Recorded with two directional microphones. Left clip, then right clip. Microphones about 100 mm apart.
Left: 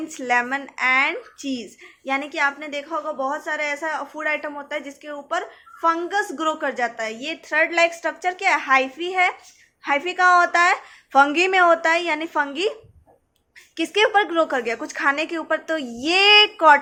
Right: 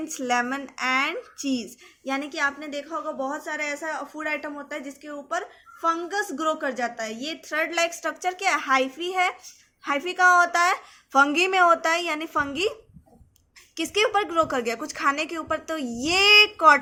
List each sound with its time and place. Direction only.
0.1 s speech: 30° right (ahead or behind)
13.7 s speech: 30° right (ahead or behind)